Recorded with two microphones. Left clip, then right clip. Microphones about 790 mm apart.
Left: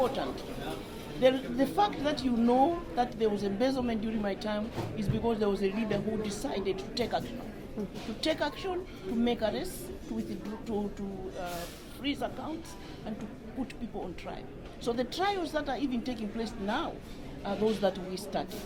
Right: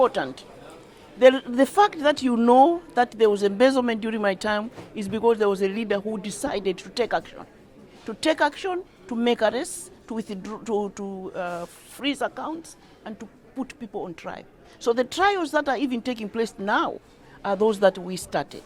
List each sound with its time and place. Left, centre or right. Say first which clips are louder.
0.0 s speech: right 9 dB; right
14.3 s speech: right 5 dB; right